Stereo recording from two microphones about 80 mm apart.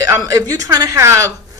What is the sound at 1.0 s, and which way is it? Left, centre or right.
Speech, right.